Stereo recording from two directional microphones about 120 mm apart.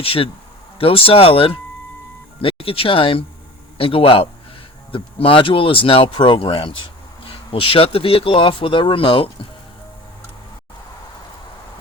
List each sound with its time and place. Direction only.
0.0 s speech: 50° left (ahead or behind)